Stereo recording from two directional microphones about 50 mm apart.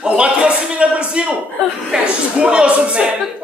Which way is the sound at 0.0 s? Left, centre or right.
Right.